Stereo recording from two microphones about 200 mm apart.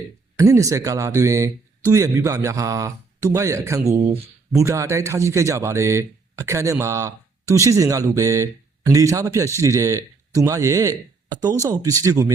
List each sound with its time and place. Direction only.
0.3 s speech: 15° right (ahead or behind)